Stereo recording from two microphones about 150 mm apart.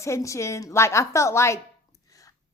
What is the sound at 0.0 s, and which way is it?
A woman's voice, 20° left (ahead or behind).